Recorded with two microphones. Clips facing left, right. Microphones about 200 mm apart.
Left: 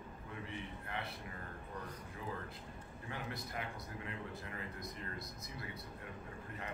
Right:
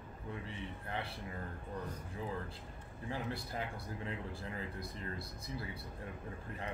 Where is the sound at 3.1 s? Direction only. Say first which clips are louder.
Right 4 dB; 30° right (ahead or behind).